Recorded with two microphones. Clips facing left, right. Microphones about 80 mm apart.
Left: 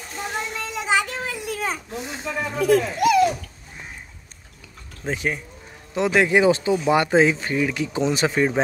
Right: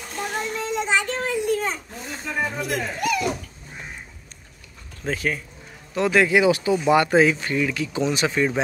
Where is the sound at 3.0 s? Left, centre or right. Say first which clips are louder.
Left 6 dB; left.